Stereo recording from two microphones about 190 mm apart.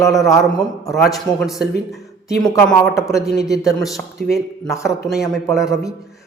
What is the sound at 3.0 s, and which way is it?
A man's voice, centre (ahead or behind).